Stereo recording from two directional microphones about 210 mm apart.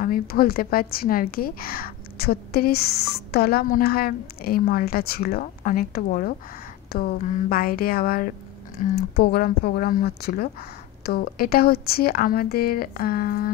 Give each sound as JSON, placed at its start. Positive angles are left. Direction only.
{"t": 0.0, "sound": "a woman's voice", "side_deg": 45}